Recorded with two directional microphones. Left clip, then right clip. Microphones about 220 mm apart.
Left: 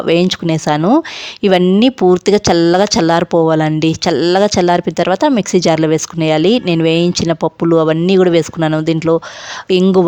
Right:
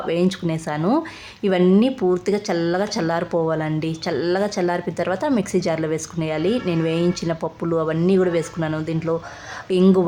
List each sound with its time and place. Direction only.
0.0 s speech: 40° left (ahead or behind)